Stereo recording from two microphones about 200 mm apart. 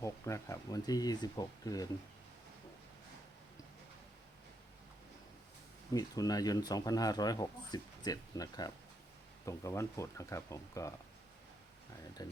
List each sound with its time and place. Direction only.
0.0 s speech: 15° left (ahead or behind)
5.9 s speech: 20° left (ahead or behind)
12.2 s speech: 20° left (ahead or behind)